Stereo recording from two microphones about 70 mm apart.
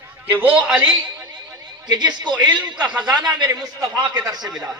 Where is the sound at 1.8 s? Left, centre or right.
Right.